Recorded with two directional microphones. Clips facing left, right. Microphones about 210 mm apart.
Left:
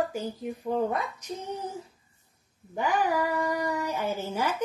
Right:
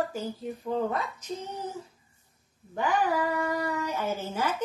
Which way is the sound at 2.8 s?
15° left (ahead or behind).